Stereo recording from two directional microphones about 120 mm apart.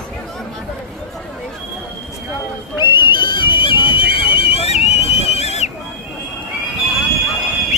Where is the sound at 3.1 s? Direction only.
40° left (ahead or behind); by 5.7 s 65° left (ahead or behind).